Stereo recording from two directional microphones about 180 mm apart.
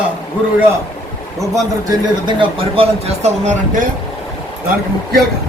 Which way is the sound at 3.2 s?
40° right (ahead or behind).